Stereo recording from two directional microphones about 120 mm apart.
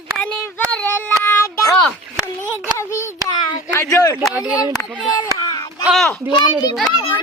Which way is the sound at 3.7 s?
25° left (ahead or behind).